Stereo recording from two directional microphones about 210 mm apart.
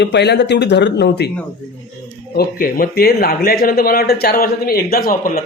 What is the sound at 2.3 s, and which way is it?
A man's voice, 45° left (ahead or behind).